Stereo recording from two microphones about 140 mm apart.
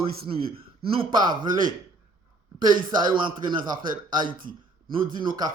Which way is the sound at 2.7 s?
30° right (ahead or behind).